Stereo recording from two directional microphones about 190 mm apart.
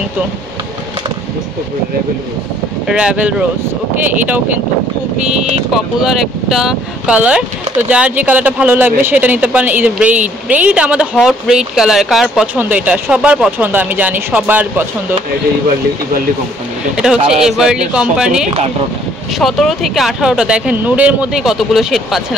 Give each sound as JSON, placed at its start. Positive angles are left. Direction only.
{"t": 2.9, "sound": "speech", "side_deg": -5}
{"t": 5.7, "sound": "speech", "side_deg": 0}
{"t": 16.9, "sound": "speech", "side_deg": -5}